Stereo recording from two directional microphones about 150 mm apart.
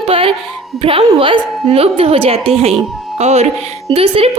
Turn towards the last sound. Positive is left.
turn(degrees=-40)  # may be behind; listen again after turning